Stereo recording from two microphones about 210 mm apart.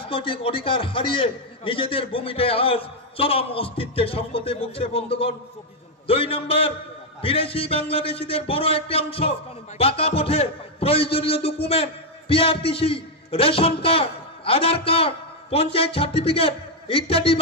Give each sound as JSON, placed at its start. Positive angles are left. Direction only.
{"t": 0.0, "sound": "a man's voice", "side_deg": 25}